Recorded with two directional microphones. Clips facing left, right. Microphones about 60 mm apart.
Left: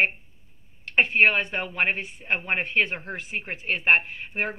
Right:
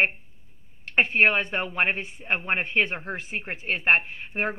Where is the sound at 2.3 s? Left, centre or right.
Centre.